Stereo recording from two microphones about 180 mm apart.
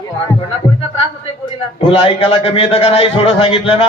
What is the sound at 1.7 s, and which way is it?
A woman's voice, 35° left (ahead or behind).